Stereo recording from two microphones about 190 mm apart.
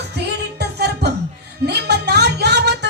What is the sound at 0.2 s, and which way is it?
Music, 60° right (ahead or behind).